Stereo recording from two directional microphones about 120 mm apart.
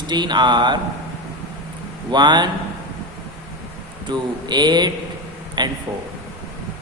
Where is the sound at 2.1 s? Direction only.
40° right (ahead or behind).